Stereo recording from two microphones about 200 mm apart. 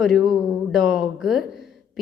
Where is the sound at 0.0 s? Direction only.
Centre (ahead or behind).